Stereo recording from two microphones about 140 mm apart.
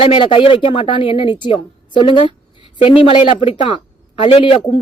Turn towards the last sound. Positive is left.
turn(degrees=40)  # may be behind; listen again after turning